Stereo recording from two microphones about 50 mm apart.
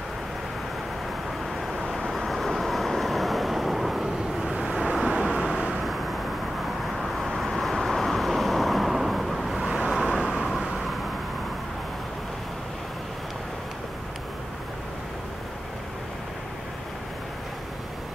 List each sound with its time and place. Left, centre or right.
1.7 s vehicle: centre
4.6 s vehicle: centre
7.0 s vehicle: centre
9.8 s vehicle: centre
10.5 s vehicle: centre